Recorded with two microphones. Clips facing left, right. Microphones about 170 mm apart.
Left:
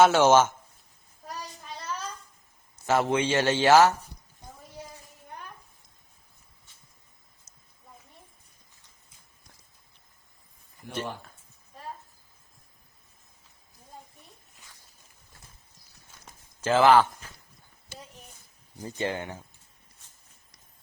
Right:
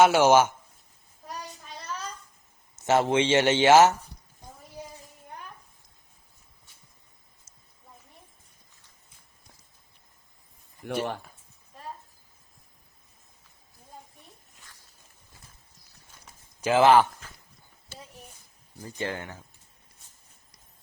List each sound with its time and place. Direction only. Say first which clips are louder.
0.0 s speech: even; 10° right (ahead or behind)
2.8 s speech: right 2 dB; 25° right (ahead or behind)
7.5 s a sound: even; 30° right (ahead or behind)
10.8 s speech: right 5 dB; 70° right (ahead or behind)
16.6 s speech: right 1 dB; 15° right (ahead or behind)
18.8 s speech: left 2 dB; 20° left (ahead or behind)